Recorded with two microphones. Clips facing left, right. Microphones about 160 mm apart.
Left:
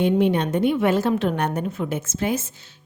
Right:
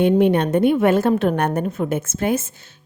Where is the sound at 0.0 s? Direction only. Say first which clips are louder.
Right 4 dB; 55° right (ahead or behind).